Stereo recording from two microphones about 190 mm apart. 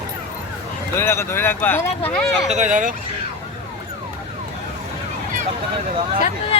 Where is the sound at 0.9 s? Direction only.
15° left (ahead or behind).